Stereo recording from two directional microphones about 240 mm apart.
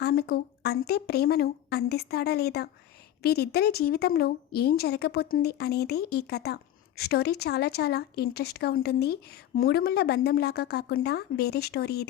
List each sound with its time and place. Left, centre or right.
0.0 s a woman's voice: left